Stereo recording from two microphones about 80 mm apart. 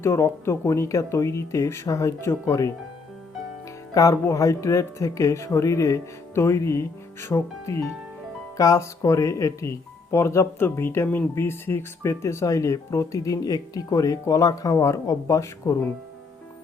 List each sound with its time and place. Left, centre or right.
0.0 s speech: left
3.9 s speech: left